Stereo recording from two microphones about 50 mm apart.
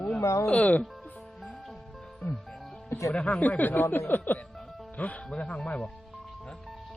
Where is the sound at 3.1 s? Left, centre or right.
Left.